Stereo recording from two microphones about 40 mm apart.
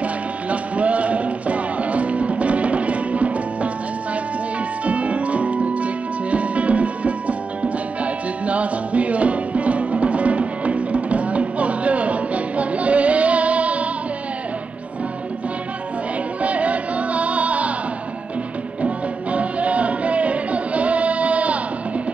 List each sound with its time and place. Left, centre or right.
0.5 s music: right
4.8 s music: right
16.4 s music: right
19.3 s music: right